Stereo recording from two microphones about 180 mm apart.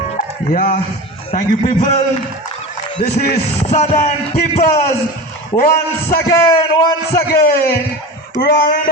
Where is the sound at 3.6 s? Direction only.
35° left (ahead or behind).